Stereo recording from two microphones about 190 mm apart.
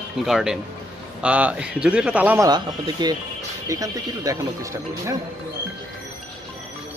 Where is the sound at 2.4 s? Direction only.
20° right (ahead or behind).